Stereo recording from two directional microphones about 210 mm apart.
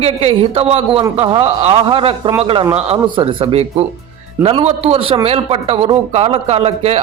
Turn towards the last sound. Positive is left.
turn(degrees=-25)  # may be behind; listen again after turning